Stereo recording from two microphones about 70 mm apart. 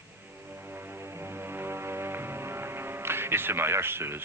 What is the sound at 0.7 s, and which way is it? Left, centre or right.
Music, right.